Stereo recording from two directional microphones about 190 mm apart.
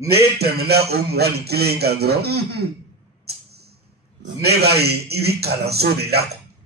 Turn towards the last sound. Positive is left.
turn(degrees=-55)  # may be behind; listen again after turning